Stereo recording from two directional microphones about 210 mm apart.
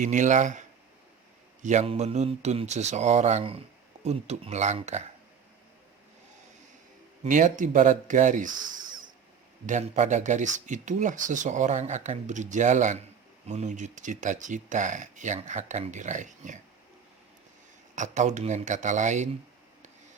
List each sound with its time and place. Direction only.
0.0 s speech: 35° right (ahead or behind)
1.6 s speech: 35° right (ahead or behind)
7.3 s speech: 35° right (ahead or behind)
17.9 s speech: 35° right (ahead or behind)